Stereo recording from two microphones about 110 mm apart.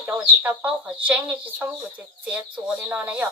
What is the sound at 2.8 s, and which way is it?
Speech, 15° right (ahead or behind).